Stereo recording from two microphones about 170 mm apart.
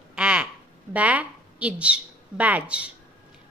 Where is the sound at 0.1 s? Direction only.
5° right (ahead or behind).